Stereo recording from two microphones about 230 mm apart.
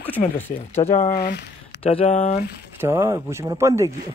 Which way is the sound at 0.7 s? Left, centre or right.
Left.